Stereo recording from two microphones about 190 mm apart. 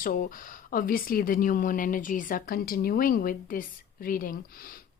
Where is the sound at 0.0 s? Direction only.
45° left (ahead or behind).